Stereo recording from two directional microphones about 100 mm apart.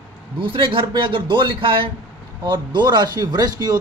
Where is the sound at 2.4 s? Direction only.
50° right (ahead or behind).